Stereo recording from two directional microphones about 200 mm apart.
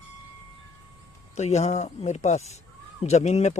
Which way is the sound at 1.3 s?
35° left (ahead or behind).